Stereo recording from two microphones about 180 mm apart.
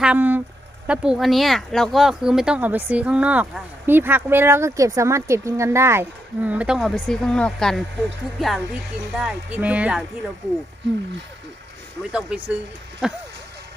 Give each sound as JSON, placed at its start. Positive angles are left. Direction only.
{"t": 0.0, "sound": "speech", "side_deg": -10}
{"t": 12.1, "sound": "speech", "side_deg": -5}